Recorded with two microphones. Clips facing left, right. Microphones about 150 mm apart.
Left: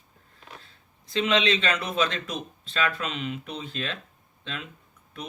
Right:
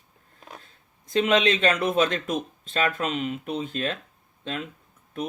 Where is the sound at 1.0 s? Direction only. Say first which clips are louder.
Right 3 dB; 50° right (ahead or behind).